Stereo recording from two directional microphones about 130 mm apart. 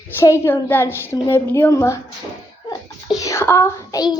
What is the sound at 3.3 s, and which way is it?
Speech, 20° left (ahead or behind).